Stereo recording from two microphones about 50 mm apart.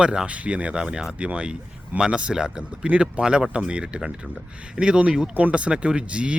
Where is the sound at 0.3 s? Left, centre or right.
Right.